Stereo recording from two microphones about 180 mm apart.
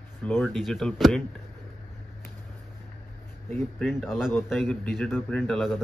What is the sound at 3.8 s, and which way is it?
A man's voice, centre (ahead or behind).